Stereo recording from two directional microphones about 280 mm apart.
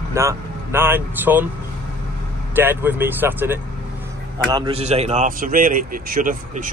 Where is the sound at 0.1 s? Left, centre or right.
Centre.